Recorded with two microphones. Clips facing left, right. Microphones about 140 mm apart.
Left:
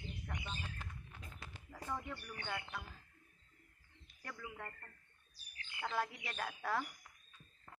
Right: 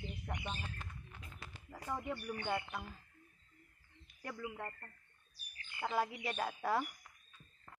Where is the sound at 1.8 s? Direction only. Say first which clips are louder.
Right 4 dB; 15° right (ahead or behind).